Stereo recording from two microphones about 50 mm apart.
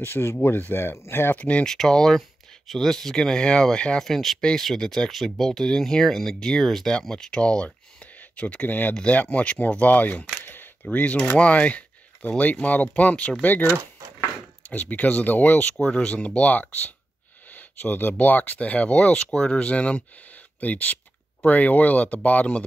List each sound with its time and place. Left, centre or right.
0.0 s speech: left
0.9 s speech: left
1.3 s speech: left
1.6 s speech: centre
4.4 s speech: centre; by 10.2 s left
10.4 s camera: left
10.9 s speech: left
13.4 s speech: left
14.7 s speech: left
15.8 s speech: centre
17.5 s a sound: left
18.2 s speech: left